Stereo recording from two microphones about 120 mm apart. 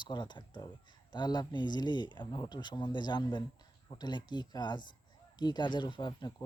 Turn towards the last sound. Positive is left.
turn(degrees=40)  # may be behind; listen again after turning